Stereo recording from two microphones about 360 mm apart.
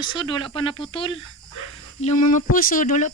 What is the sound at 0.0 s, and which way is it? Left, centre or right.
Speech, centre.